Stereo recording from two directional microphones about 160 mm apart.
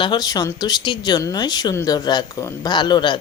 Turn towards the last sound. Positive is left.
turn(degrees=30)  # may be behind; listen again after turning